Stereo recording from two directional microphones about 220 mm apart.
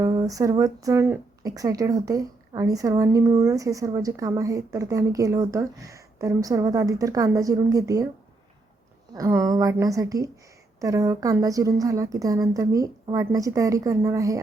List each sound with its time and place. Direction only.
0.0 s speech: 15° right (ahead or behind)
9.1 s speech: 15° right (ahead or behind)